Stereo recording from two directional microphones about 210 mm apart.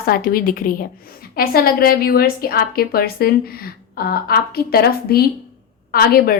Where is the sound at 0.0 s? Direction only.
45° left (ahead or behind).